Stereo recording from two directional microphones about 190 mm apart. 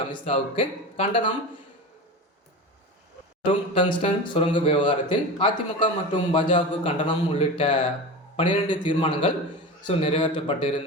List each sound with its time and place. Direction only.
0.1 s speech: 30° left (ahead or behind)
3.4 s speech: 25° left (ahead or behind)